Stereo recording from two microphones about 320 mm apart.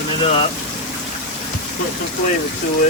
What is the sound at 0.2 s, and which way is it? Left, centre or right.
Speech, centre.